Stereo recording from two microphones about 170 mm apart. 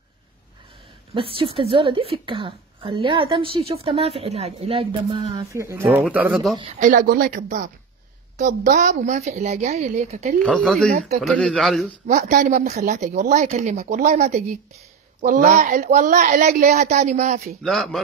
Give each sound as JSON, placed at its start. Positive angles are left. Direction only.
{"t": 1.1, "sound": "a woman's voice", "side_deg": -30}
{"t": 6.1, "sound": "speech", "side_deg": -5}
{"t": 6.8, "sound": "a woman's voice", "side_deg": -50}
{"t": 8.7, "sound": "a woman's voice", "side_deg": -45}
{"t": 10.4, "sound": "speech", "side_deg": 5}
{"t": 12.2, "sound": "a woman's voice", "side_deg": -50}
{"t": 17.6, "sound": "speech", "side_deg": 0}